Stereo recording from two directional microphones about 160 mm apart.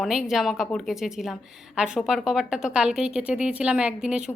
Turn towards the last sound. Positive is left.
turn(degrees=-5)  # may be behind; listen again after turning